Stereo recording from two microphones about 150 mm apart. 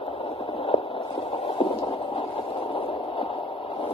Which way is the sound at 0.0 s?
40° left (ahead or behind).